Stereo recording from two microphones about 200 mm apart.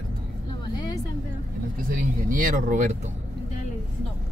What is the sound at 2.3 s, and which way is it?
Speech, 40° right (ahead or behind).